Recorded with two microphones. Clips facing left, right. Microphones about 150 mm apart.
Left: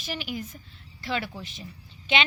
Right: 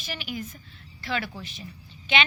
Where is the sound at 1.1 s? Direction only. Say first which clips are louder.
Even; 20° left (ahead or behind).